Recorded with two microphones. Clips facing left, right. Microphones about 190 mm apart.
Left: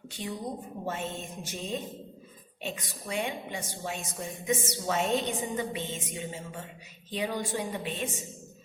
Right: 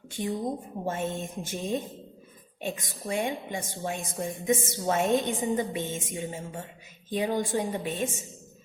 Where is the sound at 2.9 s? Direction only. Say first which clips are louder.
Right 3 dB; 50° right (ahead or behind).